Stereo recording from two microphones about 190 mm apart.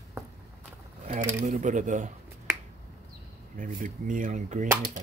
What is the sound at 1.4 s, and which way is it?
Speech, 40° right (ahead or behind).